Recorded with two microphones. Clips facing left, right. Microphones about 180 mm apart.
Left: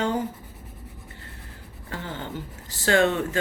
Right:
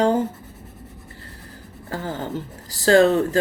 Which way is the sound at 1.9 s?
40° right (ahead or behind).